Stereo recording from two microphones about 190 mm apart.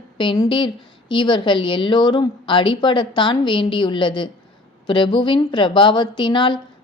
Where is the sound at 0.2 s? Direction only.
25° left (ahead or behind).